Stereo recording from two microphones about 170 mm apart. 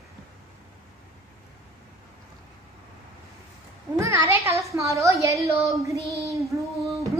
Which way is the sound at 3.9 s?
15° right (ahead or behind).